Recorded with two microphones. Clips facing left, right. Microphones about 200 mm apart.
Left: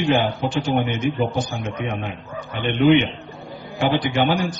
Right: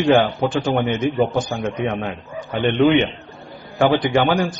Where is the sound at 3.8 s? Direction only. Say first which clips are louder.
Right 3 dB; 50° right (ahead or behind).